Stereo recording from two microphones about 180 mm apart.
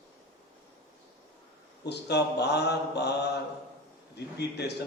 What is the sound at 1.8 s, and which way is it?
Mantra, 70° left (ahead or behind).